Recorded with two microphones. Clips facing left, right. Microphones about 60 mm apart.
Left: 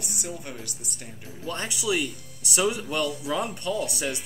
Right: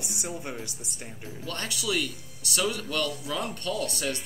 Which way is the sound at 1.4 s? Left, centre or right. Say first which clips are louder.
Left 3 dB; centre.